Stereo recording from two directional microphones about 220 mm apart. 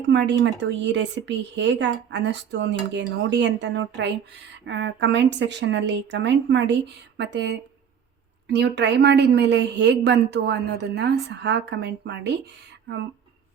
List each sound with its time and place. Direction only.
0.1 s speech: 50° right (ahead or behind)